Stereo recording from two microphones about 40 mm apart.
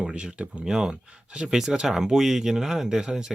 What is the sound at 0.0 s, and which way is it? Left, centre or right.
Speech, right.